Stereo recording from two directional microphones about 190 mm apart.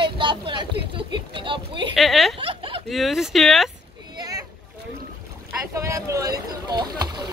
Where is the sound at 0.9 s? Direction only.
25° right (ahead or behind).